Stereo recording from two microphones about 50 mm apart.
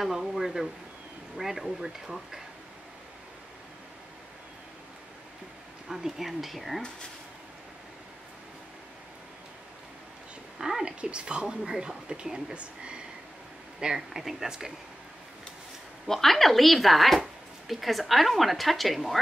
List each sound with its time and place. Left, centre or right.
0.0 s a woman's voice: centre
5.9 s speech: centre
10.6 s a woman's voice: centre
16.1 s speech: centre